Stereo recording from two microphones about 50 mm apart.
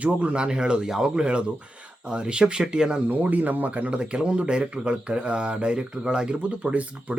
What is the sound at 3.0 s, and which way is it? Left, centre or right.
Speech, right.